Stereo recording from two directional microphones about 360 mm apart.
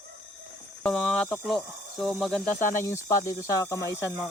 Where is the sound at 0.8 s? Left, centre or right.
Centre.